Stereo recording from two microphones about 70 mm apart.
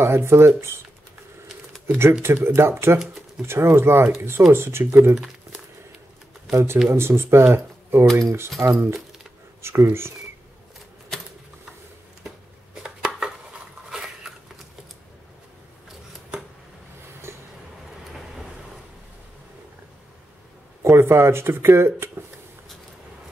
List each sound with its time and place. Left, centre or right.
0.0 s speech: right
2.2 s speech: right
6.5 s speech: right
8.2 s speech: right
12.8 s dishes: centre
20.8 s speech: right